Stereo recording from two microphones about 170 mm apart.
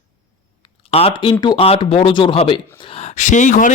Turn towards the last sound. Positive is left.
turn(degrees=50)  # may be behind; listen again after turning